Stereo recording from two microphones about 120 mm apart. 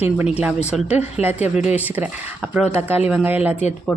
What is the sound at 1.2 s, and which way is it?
Speech, 15° right (ahead or behind).